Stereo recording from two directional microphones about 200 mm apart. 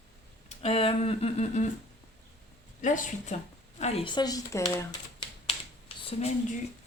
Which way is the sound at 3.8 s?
30° left (ahead or behind).